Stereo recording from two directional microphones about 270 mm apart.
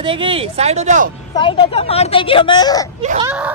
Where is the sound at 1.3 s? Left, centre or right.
Centre.